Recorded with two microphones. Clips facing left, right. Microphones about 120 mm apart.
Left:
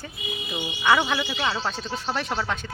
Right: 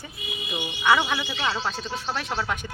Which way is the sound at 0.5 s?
Centre (ahead or behind).